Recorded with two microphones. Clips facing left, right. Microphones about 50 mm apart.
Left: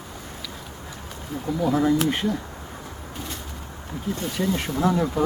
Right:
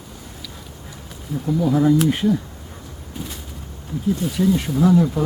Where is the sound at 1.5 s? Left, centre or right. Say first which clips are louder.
Right 4 dB; centre.